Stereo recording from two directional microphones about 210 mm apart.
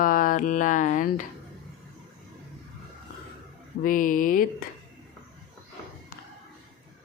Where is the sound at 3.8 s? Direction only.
40° left (ahead or behind).